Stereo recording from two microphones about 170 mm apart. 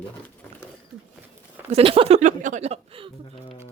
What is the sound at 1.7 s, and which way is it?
Speech, 35° right (ahead or behind).